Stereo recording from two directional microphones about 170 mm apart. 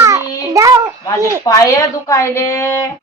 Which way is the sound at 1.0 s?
20° left (ahead or behind).